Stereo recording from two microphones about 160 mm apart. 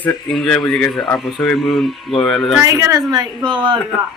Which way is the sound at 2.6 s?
20° right (ahead or behind).